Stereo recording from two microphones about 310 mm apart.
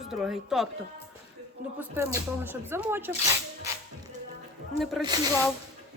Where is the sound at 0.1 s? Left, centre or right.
Centre.